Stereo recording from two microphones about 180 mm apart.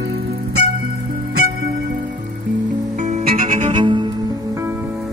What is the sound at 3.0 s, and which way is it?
Music, 45° right (ahead or behind).